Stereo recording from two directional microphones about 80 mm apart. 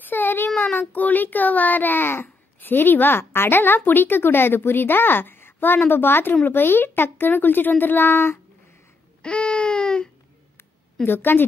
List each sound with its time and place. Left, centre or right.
0.0 s a sound: left
0.7 s a child's voice: left
9.2 s baby cry: centre
11.1 s a child's voice: left